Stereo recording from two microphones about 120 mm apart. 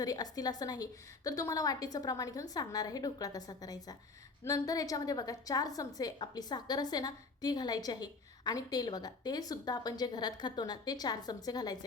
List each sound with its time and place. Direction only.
0.0 s a woman's voice: 30° left (ahead or behind)